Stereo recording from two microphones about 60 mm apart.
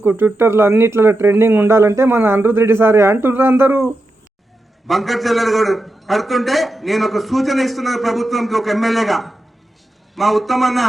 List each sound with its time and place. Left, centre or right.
0.0 s speech: right
4.9 s a man's voice: centre